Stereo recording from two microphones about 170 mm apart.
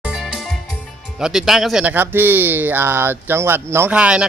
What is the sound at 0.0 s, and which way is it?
Music, centre (ahead or behind).